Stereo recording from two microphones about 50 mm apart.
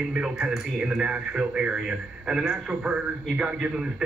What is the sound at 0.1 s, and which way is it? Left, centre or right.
Speech, centre.